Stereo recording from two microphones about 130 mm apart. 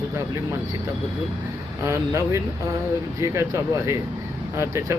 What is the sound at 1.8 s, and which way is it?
Speech, 20° right (ahead or behind).